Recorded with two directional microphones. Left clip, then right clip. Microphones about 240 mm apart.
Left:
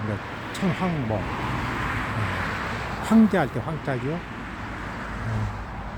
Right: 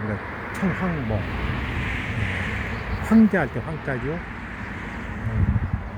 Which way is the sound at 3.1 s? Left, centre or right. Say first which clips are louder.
Right 1 dB; centre.